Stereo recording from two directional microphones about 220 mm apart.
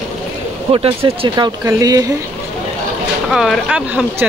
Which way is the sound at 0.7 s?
25° right (ahead or behind).